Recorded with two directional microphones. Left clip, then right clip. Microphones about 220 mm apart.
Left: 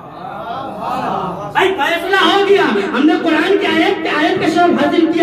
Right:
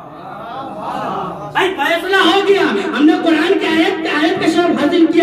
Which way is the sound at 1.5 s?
Centre (ahead or behind).